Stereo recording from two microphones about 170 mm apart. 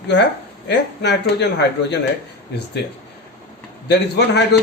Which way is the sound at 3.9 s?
80° left.